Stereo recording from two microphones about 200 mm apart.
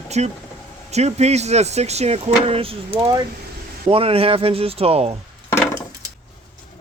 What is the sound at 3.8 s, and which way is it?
Speech, 30° right (ahead or behind).